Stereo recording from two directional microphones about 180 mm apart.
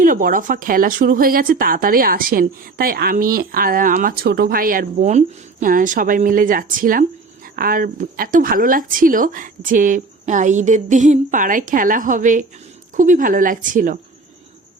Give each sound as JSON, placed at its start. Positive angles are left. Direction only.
{"t": 0.0, "sound": "speech", "side_deg": -50}